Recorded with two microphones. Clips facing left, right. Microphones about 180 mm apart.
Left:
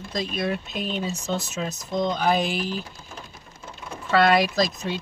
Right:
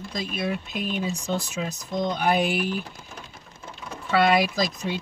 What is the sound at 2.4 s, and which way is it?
Speech, 60° right (ahead or behind).